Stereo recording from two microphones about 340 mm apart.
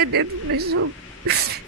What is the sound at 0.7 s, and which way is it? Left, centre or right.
Speech, right.